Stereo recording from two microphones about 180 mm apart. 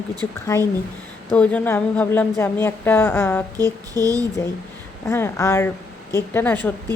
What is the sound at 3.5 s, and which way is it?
Speech, 20° right (ahead or behind).